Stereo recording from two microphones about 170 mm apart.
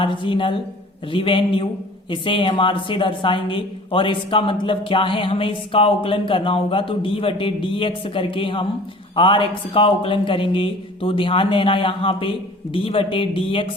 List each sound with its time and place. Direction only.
0.0 s a woman's voice: 30° left (ahead or behind)